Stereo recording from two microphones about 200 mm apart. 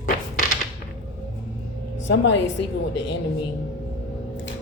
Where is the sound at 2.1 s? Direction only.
65° left (ahead or behind).